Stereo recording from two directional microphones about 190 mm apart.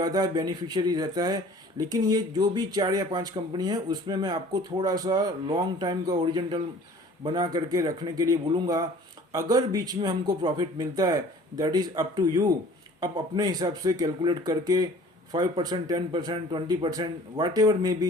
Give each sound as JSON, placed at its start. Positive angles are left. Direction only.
{"t": 0.0, "sound": "speech", "side_deg": -20}